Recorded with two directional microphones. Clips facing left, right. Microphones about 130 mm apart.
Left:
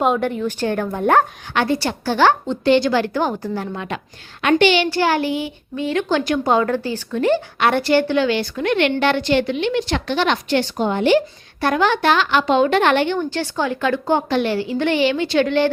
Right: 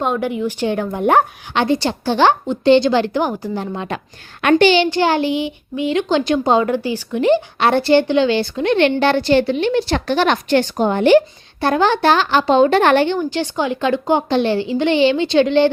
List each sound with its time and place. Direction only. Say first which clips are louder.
0.2 s speech: right 1 dB; 10° right (ahead or behind)
3.8 s a woman's voice: right 2 dB; 50° right (ahead or behind)
4.6 s a woman's voice: right 2 dB; 30° right (ahead or behind)
7.6 s a woman's voice: right 2 dB; 30° right (ahead or behind); by 11.2 s 50° right (ahead or behind)
11.6 s a woman's voice: right 2 dB; 30° right (ahead or behind)
13.3 s speech: right 2 dB; 20° right (ahead or behind)